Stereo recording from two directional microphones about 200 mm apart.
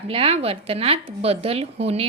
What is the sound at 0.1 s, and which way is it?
A woman's voice, 30° right (ahead or behind).